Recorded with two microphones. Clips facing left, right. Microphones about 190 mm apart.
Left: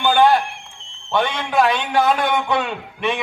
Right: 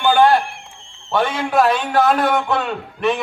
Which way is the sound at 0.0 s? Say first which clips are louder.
Right 1 dB; centre (ahead or behind).